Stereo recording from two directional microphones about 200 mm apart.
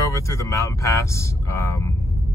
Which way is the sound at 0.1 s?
15° left (ahead or behind).